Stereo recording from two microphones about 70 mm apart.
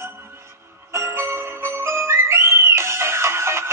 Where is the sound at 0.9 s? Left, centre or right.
Right.